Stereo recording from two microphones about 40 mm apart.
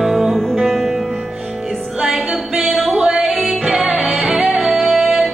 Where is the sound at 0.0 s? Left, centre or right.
Centre.